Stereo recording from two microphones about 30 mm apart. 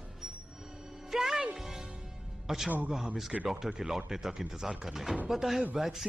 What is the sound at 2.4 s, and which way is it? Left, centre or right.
A man's voice, centre.